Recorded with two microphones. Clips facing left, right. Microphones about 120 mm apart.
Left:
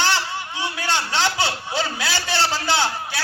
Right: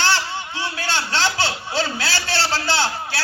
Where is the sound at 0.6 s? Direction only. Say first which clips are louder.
Left 2 dB; 20° left (ahead or behind).